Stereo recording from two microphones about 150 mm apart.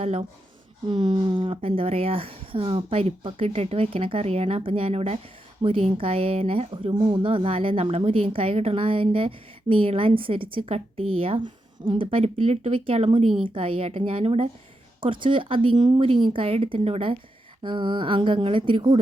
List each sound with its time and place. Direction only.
0.0 s speech: 45° right (ahead or behind)
0.9 s a woman's voice: 30° right (ahead or behind)